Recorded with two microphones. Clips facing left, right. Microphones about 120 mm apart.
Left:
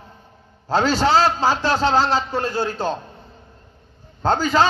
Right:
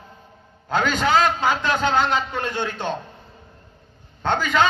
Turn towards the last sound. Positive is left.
turn(degrees=35)  # may be behind; listen again after turning